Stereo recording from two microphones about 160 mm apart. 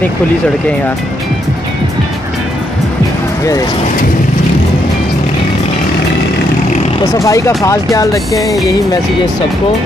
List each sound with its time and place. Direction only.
7.2 s speech: 20° left (ahead or behind)